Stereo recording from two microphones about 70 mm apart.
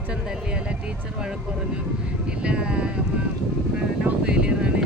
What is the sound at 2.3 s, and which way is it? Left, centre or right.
Speech, centre.